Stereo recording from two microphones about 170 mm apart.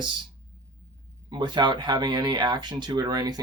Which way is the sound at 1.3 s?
25° right (ahead or behind).